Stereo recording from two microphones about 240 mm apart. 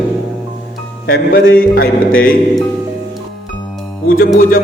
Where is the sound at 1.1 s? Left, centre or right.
Left.